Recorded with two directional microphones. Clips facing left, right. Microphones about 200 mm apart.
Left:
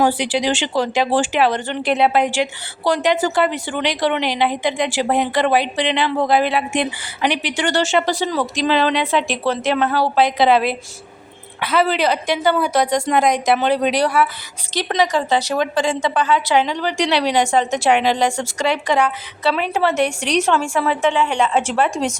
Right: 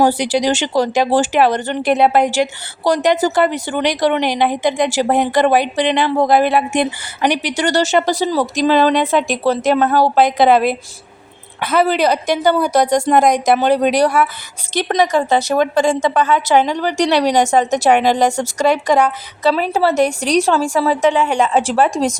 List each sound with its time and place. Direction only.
0.0 s speech: 40° right (ahead or behind)